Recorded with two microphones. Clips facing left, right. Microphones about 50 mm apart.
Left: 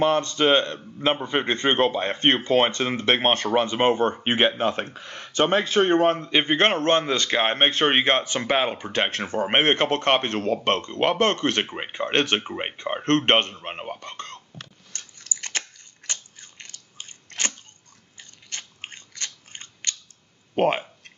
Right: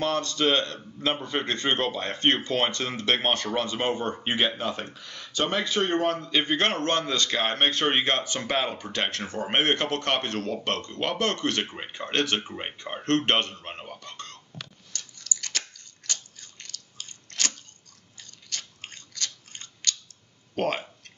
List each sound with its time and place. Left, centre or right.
0.0 s speech: left
14.9 s biting: left
16.1 s camera: left
18.1 s scissors: left
20.5 s speech: left